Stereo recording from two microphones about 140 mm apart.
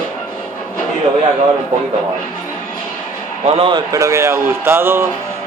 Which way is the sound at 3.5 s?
35° right (ahead or behind).